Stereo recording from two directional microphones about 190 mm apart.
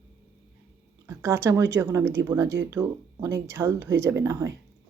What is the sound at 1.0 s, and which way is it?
Speech, 15° right (ahead or behind).